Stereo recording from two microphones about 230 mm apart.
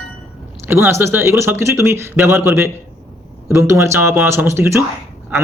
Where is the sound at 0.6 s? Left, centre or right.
Centre.